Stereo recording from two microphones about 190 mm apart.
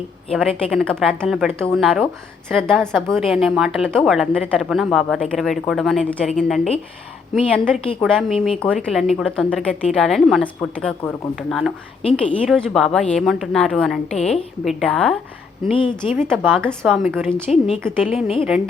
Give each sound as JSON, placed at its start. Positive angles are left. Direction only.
{"t": 0.3, "sound": "a woman's voice", "side_deg": 5}
{"t": 11.3, "sound": "a woman's voice", "side_deg": 0}
{"t": 15.7, "sound": "speech", "side_deg": 30}
{"t": 16.3, "sound": "a woman's voice", "side_deg": 5}